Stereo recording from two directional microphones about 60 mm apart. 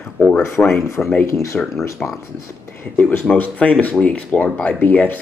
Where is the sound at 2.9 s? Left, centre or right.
Left.